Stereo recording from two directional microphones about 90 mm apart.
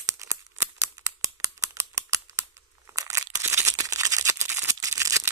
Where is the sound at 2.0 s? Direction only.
35° right (ahead or behind).